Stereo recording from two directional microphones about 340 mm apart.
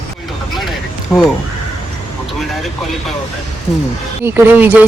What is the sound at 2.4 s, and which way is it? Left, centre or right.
Speech, centre.